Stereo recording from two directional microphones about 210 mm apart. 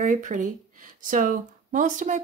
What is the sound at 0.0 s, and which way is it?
Speech, 35° right (ahead or behind).